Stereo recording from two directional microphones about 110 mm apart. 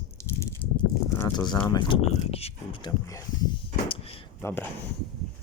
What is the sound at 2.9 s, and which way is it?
Speech, 35° left (ahead or behind).